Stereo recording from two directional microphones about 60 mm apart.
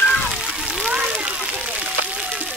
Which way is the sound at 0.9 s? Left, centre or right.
Centre.